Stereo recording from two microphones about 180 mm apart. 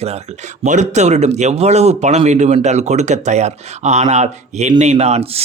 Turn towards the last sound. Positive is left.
turn(degrees=-35)  # may be behind; listen again after turning